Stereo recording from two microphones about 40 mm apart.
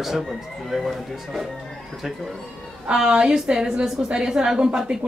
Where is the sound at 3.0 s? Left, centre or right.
Right.